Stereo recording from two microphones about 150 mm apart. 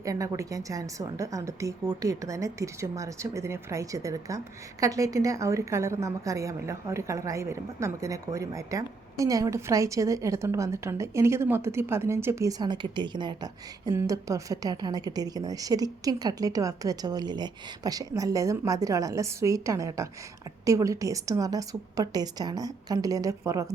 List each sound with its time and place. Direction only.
0.0 s a woman's voice: 20° right (ahead or behind)